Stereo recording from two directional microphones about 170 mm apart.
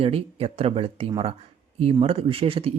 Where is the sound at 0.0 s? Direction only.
35° right (ahead or behind).